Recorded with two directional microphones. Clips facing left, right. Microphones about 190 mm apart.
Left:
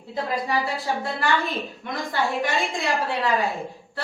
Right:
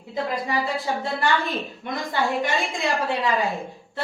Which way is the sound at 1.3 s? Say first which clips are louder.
Even; centre (ahead or behind).